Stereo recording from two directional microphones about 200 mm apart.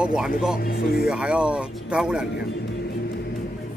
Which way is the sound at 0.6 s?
50° left (ahead or behind).